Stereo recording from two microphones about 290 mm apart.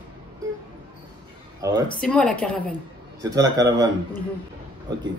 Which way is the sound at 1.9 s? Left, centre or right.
Centre.